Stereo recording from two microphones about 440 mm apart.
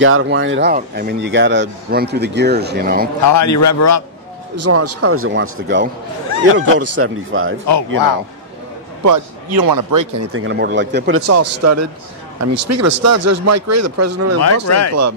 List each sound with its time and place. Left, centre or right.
0.0 s speech: right
3.3 s speech: left
4.6 s speech: right
9.0 s speech: right
10.3 s a man's voice: right
14.4 s speech: left